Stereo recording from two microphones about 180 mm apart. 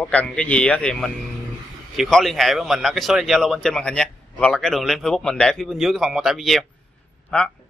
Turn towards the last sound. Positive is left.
turn(degrees=5)  # may be behind; listen again after turning